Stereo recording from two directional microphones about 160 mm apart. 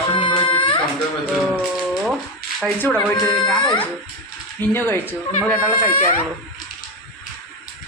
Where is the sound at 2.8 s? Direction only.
10° left (ahead or behind).